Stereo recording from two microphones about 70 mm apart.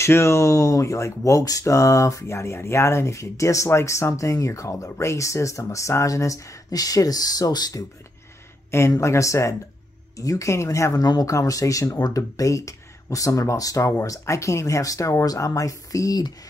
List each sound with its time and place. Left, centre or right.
0.0 s speech: left
9.0 s speech: left
11.0 s speech: left
11.2 s speech: left